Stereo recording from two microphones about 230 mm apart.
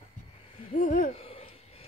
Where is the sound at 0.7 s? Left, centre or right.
Left.